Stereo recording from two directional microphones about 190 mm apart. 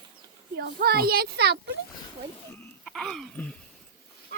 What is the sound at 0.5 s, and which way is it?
A child's voice, 60° right (ahead or behind).